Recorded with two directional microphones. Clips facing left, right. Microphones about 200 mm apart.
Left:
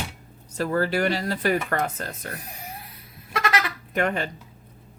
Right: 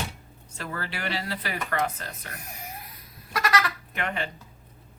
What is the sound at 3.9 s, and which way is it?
Speech, 45° left (ahead or behind).